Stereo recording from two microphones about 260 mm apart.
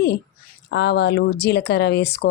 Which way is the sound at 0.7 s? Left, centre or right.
Left.